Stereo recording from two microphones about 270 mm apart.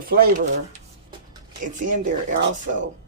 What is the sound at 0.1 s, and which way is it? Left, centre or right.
Speech, right.